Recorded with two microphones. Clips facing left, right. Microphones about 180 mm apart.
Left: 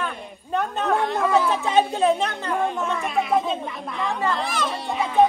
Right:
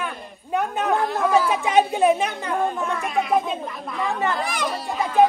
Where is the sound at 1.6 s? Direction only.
15° right (ahead or behind).